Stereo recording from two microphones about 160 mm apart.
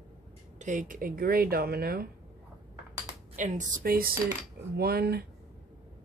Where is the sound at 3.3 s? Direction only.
50° right (ahead or behind).